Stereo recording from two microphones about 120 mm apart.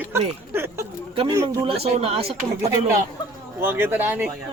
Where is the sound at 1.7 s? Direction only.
55° right (ahead or behind).